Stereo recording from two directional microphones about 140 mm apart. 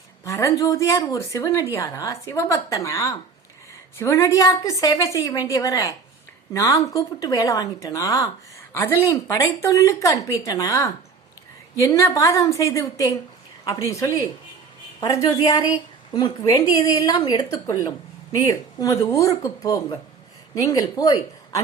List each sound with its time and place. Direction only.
0.3 s speech: 20° left (ahead or behind)